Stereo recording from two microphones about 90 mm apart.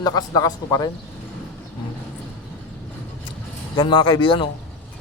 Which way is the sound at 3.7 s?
60° left (ahead or behind).